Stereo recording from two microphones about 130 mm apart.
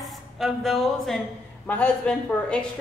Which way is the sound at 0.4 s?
Centre (ahead or behind).